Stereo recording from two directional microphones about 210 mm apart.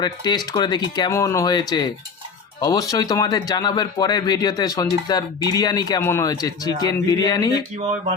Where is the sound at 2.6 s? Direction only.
20° left (ahead or behind).